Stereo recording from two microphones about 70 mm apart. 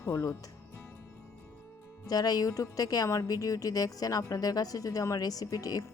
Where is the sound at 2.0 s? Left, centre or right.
Left.